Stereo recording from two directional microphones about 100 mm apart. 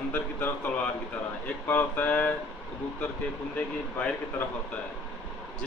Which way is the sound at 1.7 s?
15° left (ahead or behind).